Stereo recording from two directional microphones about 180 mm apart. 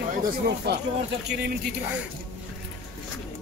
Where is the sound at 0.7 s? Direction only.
70° right (ahead or behind).